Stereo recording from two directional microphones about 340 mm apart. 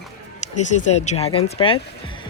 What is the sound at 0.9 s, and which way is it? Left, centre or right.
Speech, centre.